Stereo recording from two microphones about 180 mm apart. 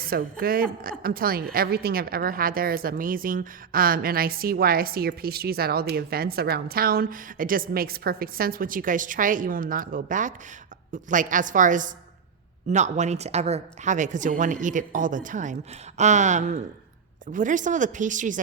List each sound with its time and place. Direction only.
0.0 s a woman's voice: 55° right (ahead or behind)